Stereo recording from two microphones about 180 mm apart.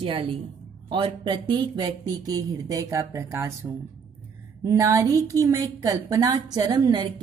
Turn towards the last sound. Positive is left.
turn(degrees=-20)  # may be behind; listen again after turning